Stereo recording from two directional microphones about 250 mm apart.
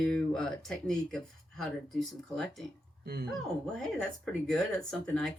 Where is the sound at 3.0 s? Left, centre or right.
Right.